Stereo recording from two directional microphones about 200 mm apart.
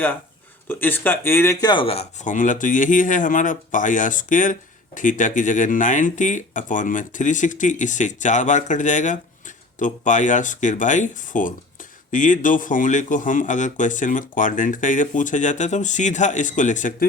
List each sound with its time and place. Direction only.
0.7 s speech: 10° left (ahead or behind)
1.7 s speech: 30° left (ahead or behind)